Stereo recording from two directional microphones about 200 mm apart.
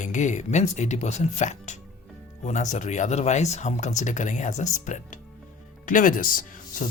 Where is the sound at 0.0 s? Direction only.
35° left (ahead or behind).